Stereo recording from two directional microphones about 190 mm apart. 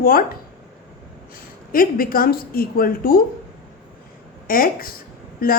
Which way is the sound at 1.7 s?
50° left (ahead or behind).